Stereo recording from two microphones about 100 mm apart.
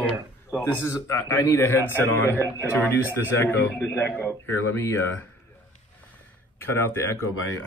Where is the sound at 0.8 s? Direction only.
25° left (ahead or behind).